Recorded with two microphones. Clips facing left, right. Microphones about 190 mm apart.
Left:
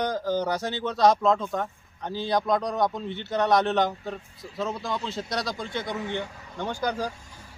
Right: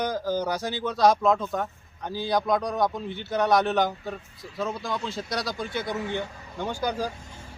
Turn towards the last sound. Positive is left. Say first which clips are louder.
# even
turn(degrees=-10)  # may be behind; listen again after turning